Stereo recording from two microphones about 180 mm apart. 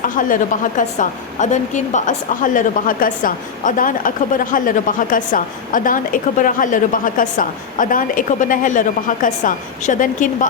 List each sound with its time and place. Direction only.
0.0 s a woman's voice: 45° left (ahead or behind)